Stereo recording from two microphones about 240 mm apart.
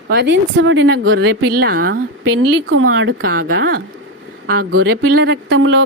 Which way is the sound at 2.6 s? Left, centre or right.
Right.